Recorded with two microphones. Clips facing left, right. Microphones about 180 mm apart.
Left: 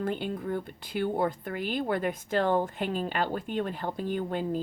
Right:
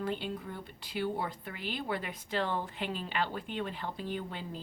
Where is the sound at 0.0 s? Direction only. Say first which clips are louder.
Left 5 dB; 50° left (ahead or behind).